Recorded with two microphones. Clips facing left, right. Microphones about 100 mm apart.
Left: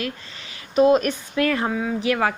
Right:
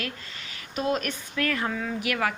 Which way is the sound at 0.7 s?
35° left (ahead or behind).